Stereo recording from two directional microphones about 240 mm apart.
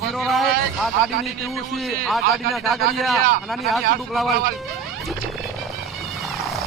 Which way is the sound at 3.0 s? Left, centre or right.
Centre.